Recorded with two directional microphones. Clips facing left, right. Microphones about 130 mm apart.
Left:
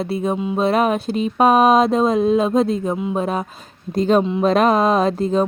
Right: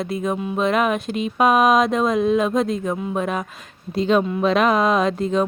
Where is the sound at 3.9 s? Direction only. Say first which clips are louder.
Left 2 dB; 45° left (ahead or behind).